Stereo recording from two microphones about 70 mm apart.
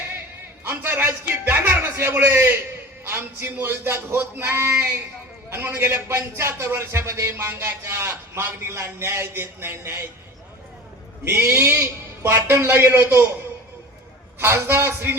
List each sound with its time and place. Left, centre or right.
0.7 s a man's voice: right
11.3 s a man's voice: right
14.3 s a man's voice: right